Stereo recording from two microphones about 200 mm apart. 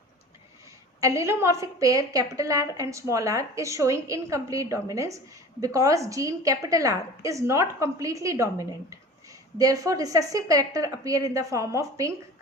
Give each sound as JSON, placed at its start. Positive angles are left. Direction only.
{"t": 1.0, "sound": "a woman's voice", "side_deg": -15}